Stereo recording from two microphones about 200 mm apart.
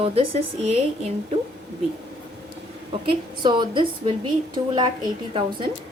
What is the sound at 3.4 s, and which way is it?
Speech, 25° right (ahead or behind).